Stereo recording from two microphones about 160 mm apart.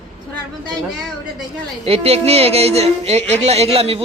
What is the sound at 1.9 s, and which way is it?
Speech, 40° right (ahead or behind).